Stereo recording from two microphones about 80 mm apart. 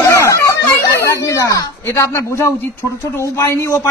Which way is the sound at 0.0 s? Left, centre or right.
Left.